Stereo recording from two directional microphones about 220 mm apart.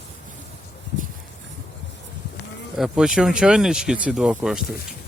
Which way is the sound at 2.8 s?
Centre (ahead or behind).